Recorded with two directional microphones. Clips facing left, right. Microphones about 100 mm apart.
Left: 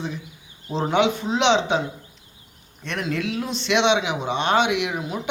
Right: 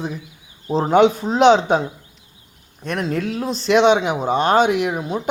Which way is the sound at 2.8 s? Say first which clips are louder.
Right 4 dB; 40° right (ahead or behind).